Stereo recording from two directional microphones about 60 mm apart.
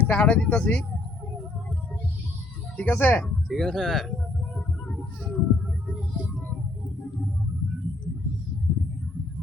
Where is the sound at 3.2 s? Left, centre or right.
Centre.